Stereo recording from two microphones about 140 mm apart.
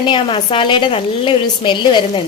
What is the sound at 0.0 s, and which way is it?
Speech, 35° left (ahead or behind).